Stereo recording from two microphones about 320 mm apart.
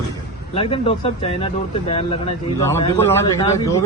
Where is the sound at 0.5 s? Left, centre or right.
Centre.